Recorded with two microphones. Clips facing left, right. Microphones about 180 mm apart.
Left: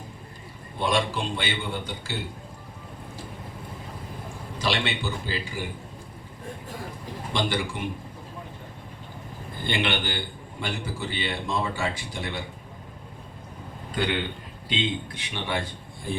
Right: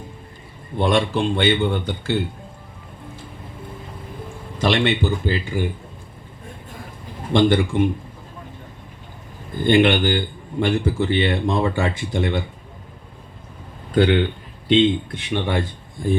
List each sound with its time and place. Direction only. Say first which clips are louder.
0.8 s a man's voice: right 7 dB; 55° right (ahead or behind)
4.5 s speech: right 9 dB; 50° right (ahead or behind)
7.3 s speech: right 11 dB; 50° right (ahead or behind)
9.6 s speech: right 12 dB; 45° right (ahead or behind)
13.9 s a man's voice: right 11 dB; 60° right (ahead or behind)